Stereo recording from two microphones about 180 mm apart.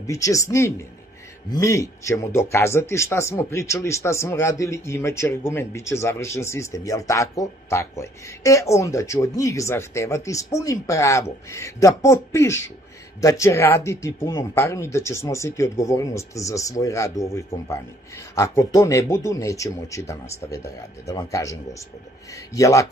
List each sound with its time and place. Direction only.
0.0 s speech: 15° left (ahead or behind)